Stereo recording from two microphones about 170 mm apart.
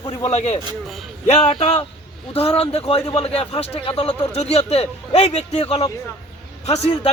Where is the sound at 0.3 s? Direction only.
40° left (ahead or behind).